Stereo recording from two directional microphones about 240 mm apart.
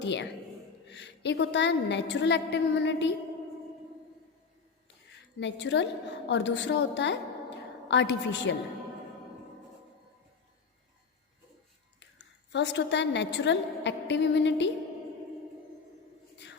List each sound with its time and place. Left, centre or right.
0.0 s a woman's voice: left
5.4 s a woman's voice: left
12.5 s a woman's voice: left